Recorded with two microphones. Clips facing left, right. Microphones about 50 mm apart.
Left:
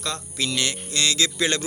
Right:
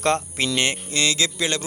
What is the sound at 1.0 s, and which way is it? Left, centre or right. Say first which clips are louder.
Speech: right 1 dB; centre.